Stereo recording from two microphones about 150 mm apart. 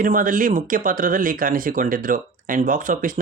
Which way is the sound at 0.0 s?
65° right (ahead or behind).